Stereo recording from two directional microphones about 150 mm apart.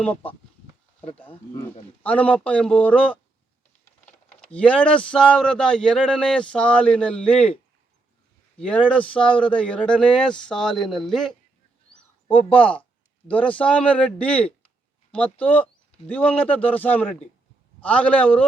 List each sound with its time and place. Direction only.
0.0 s speech: 10° left (ahead or behind)
4.3 s speech: 10° left (ahead or behind)
8.5 s speech: 10° left (ahead or behind)
12.3 s speech: 10° left (ahead or behind)